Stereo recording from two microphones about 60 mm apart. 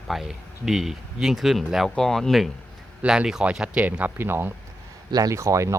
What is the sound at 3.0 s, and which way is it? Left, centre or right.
Speech, centre.